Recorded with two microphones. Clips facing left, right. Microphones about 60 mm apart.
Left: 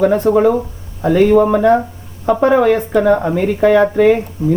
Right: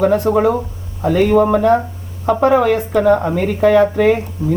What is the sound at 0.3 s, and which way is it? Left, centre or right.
Speech, centre.